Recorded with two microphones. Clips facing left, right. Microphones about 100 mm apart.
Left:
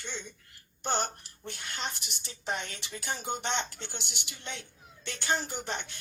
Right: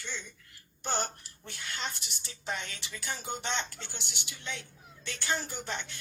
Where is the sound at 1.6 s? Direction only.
20° left (ahead or behind).